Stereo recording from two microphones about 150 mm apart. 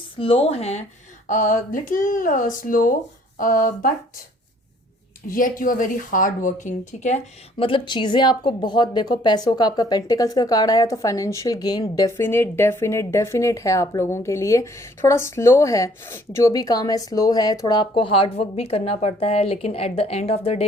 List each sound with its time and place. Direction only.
0.2 s speech: 40° left (ahead or behind)
1.3 s speech: 60° left (ahead or behind)
5.3 s speech: 65° left (ahead or behind)
7.6 s speech: 35° left (ahead or behind)